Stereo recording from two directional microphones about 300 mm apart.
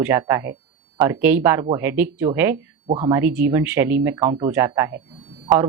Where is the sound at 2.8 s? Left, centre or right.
Centre.